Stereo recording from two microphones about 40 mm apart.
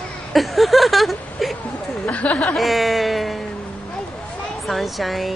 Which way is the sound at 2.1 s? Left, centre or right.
Left.